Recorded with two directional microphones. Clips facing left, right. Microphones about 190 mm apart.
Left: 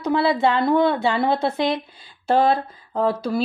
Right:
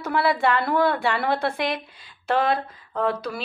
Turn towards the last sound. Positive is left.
turn(degrees=25)  # may be behind; listen again after turning